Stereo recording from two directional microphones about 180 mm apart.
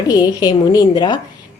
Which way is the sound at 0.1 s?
20° left (ahead or behind).